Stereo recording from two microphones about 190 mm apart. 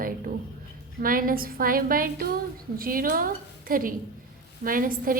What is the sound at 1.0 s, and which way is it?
A woman's voice, 50° right (ahead or behind).